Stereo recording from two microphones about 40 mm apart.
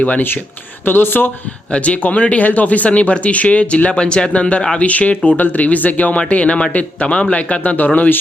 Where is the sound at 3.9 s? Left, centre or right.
Left.